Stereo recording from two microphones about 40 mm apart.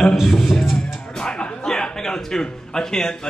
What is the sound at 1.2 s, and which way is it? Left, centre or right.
A man's voice, left.